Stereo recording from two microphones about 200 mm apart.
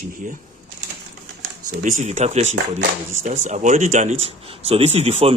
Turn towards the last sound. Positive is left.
turn(degrees=-30)  # may be behind; listen again after turning